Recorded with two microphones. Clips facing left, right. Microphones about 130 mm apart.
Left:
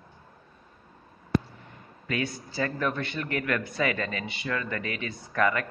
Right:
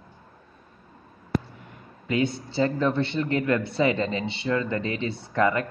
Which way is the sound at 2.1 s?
25° right (ahead or behind).